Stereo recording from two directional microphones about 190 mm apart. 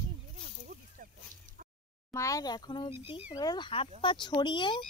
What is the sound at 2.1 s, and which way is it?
Speech, 15° left (ahead or behind).